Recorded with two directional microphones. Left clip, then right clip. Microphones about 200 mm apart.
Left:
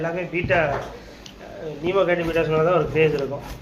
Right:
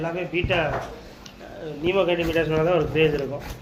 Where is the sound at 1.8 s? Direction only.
20° right (ahead or behind).